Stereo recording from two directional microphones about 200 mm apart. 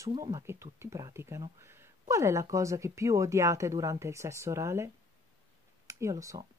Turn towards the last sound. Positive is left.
turn(degrees=-15)  # may be behind; listen again after turning